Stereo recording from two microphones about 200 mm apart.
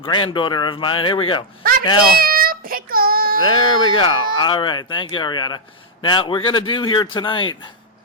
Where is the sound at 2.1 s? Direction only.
45° right (ahead or behind).